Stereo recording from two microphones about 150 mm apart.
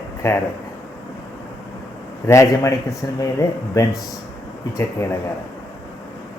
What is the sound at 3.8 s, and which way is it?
Speech, 20° left (ahead or behind).